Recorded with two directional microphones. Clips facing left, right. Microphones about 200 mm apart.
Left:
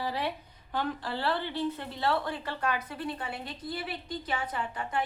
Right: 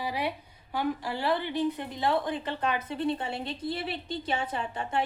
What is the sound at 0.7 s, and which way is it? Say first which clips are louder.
Speech: right 2 dB; 10° right (ahead or behind).